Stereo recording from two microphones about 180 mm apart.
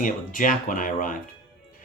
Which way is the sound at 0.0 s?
50° left (ahead or behind).